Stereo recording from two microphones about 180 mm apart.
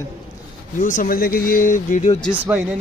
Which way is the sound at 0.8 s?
50° left (ahead or behind).